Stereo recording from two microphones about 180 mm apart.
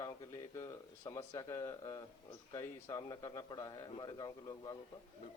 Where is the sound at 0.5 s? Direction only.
15° left (ahead or behind).